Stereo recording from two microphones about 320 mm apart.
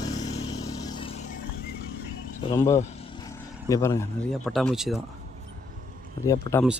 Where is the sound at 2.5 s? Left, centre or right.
Centre.